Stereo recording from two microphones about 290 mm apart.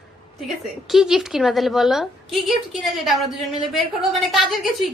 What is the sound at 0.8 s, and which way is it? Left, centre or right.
A woman's voice, centre.